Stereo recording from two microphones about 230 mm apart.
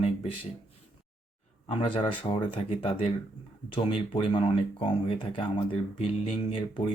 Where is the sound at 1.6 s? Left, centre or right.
Left.